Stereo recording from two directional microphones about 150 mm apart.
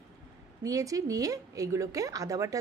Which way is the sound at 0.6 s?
20° right (ahead or behind).